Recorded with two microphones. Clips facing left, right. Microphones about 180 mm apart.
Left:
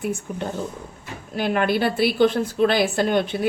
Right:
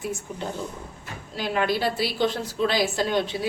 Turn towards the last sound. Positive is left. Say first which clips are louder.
# left 4 dB
turn(degrees=55)  # may be behind; listen again after turning